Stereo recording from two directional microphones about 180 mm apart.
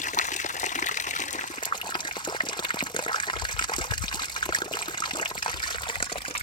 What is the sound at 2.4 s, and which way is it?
Water, 25° left (ahead or behind).